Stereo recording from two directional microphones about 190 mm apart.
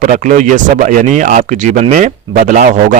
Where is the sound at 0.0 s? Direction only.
40° right (ahead or behind).